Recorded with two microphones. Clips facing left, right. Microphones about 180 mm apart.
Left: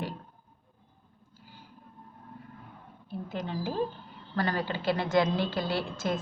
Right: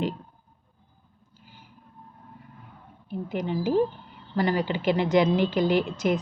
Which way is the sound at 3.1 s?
15° right (ahead or behind).